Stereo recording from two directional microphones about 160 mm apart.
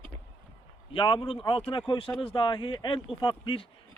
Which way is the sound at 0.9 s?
30° left (ahead or behind).